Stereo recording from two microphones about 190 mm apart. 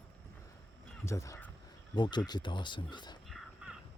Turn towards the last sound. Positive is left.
turn(degrees=0)  # may be behind; listen again after turning